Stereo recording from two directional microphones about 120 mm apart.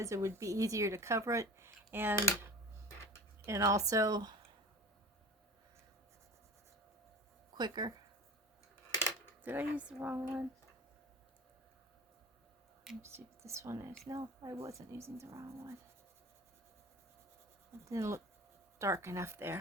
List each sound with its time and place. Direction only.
0.0 s speech: 25° right (ahead or behind)
3.4 s speech: 25° right (ahead or behind)
7.5 s speech: 35° right (ahead or behind)
9.4 s speech: 15° right (ahead or behind)
13.0 s speech: 20° right (ahead or behind)
17.8 s speech: 25° right (ahead or behind)